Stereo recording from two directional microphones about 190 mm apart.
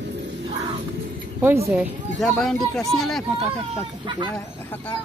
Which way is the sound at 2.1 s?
5° left (ahead or behind).